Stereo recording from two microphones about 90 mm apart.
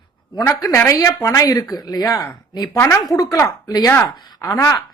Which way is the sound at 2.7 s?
25° left (ahead or behind).